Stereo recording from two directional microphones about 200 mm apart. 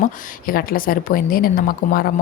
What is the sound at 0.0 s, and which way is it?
Speech, 45° left (ahead or behind).